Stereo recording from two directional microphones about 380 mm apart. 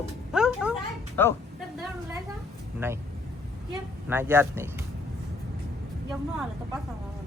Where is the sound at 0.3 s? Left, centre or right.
Centre.